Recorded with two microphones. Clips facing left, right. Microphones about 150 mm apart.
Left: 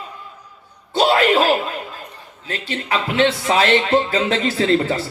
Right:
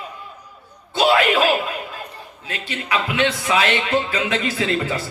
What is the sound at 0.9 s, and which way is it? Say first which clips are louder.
Speech: left 2 dB; 45° left (ahead or behind).